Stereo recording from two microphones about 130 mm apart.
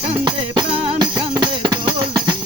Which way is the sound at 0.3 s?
35° right (ahead or behind).